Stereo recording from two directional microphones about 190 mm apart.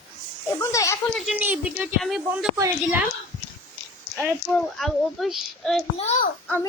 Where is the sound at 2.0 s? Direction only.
Centre (ahead or behind).